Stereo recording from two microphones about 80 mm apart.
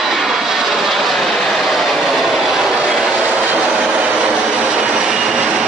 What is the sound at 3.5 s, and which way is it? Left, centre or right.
Vehicle, centre.